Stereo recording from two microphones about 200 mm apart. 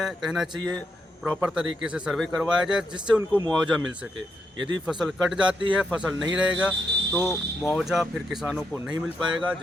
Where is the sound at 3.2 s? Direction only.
20° right (ahead or behind).